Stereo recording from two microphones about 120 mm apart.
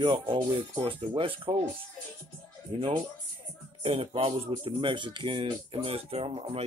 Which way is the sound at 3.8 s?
55° right (ahead or behind).